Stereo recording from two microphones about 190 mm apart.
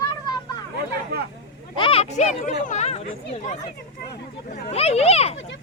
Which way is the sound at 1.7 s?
30° left (ahead or behind).